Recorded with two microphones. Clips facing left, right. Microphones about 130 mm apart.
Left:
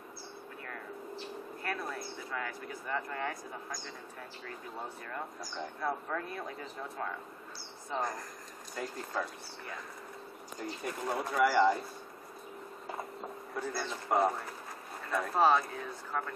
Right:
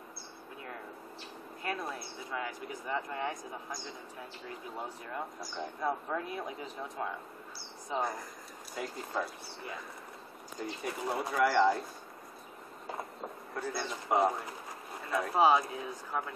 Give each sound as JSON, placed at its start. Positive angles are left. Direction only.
{"t": 1.6, "sound": "speech", "side_deg": -20}
{"t": 4.7, "sound": "speech", "side_deg": -10}
{"t": 10.8, "sound": "speech", "side_deg": -5}
{"t": 13.6, "sound": "speech", "side_deg": -5}